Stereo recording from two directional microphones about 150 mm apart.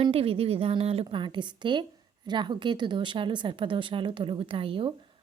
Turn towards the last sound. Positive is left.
turn(degrees=-35)  # may be behind; listen again after turning